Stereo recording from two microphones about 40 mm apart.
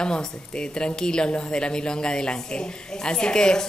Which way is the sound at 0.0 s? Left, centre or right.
Left.